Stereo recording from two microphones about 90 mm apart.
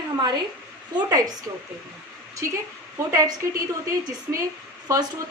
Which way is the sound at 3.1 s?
40° right (ahead or behind).